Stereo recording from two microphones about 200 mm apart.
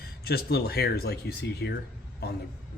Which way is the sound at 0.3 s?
50° left (ahead or behind).